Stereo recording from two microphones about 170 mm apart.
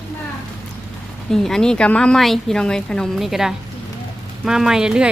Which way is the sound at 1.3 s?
5° left (ahead or behind).